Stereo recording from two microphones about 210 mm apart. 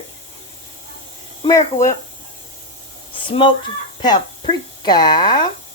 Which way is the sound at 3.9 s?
25° left (ahead or behind).